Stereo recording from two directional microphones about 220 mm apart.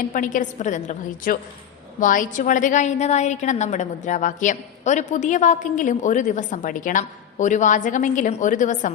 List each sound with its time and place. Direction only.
0.0 s a woman's voice: 35° left (ahead or behind)